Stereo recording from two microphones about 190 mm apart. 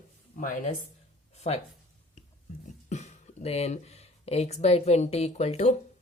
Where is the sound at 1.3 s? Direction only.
35° left (ahead or behind).